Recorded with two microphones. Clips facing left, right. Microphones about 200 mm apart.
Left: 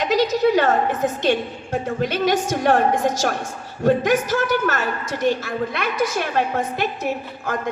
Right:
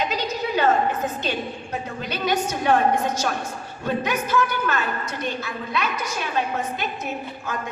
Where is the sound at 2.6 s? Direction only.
75° left (ahead or behind).